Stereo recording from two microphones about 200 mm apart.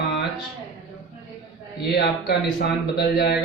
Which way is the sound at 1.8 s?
55° left (ahead or behind).